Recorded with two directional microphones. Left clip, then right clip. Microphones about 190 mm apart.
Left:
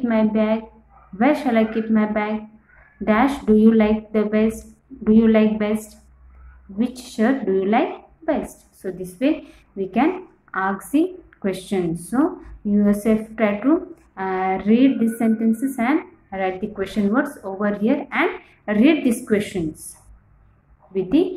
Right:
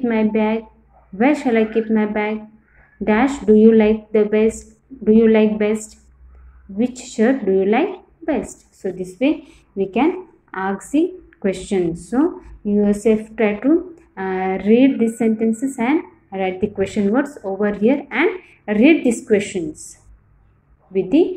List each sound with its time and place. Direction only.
0.0 s speech: 10° right (ahead or behind)